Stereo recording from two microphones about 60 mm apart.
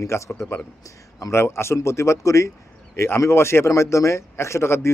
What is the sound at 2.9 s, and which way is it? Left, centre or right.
Speech, left.